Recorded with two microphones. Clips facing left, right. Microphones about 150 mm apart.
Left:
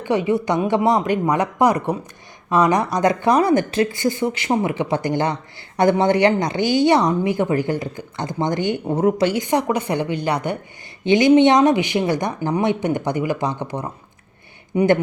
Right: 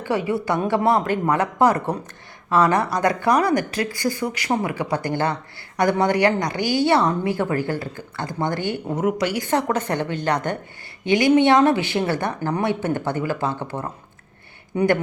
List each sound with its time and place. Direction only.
0.0 s a woman's voice: 20° left (ahead or behind)
9.0 s speech: 30° left (ahead or behind); by 10.6 s 10° left (ahead or behind)
11.0 s speech: 20° left (ahead or behind)